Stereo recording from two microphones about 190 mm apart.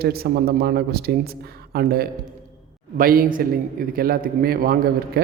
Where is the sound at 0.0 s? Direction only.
55° right (ahead or behind).